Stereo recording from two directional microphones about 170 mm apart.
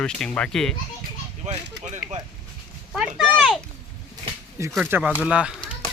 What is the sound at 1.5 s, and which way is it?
Speech, 40° right (ahead or behind).